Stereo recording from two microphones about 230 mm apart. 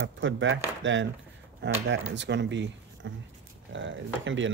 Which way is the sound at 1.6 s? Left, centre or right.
Right.